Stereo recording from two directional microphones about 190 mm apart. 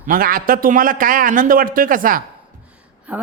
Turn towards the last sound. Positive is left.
turn(degrees=-5)  # may be behind; listen again after turning